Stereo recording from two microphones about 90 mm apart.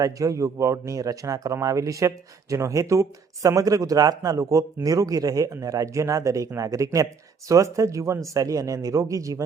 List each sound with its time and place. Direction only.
0.0 s speech: 40° right (ahead or behind)